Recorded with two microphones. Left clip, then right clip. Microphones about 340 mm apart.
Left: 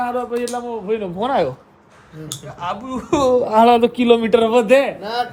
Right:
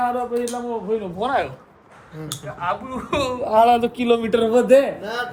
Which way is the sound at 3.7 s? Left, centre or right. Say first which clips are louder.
Left 4 dB; left.